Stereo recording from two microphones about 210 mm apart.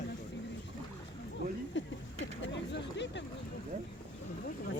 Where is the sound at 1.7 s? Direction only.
60° left (ahead or behind).